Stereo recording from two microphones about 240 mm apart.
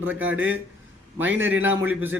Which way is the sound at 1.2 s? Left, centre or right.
Right.